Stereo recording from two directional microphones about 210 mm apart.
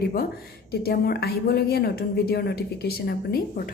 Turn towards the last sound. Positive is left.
turn(degrees=45)  # may be behind; listen again after turning